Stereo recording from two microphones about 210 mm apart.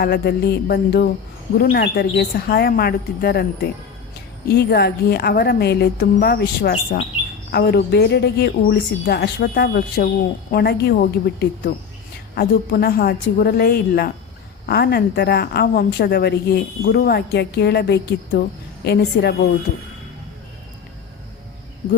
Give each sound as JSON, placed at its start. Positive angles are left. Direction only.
{"t": 0.0, "sound": "a woman's voice", "side_deg": 50}